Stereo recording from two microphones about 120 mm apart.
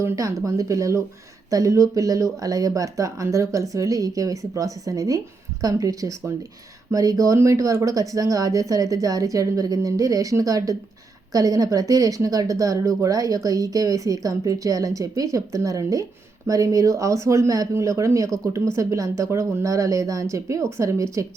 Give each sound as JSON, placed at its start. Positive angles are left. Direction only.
{"t": 0.0, "sound": "speech", "side_deg": -25}